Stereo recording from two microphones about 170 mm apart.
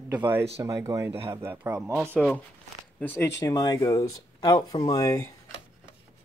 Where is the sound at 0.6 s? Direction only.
15° right (ahead or behind).